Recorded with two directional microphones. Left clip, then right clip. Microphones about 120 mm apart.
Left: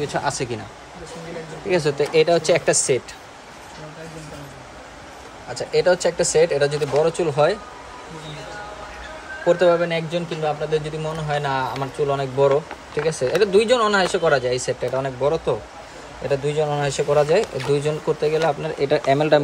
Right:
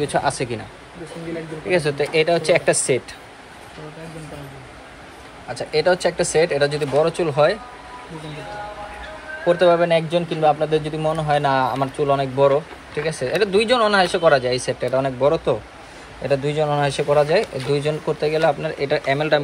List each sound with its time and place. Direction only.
0.0 s speech: 15° left (ahead or behind)
1.7 s speech: 30° left (ahead or behind)
5.5 s speech: 15° left (ahead or behind)
9.5 s speech: 20° left (ahead or behind)
9.8 s speech: centre (ahead or behind)
12.2 s speech: 20° left (ahead or behind)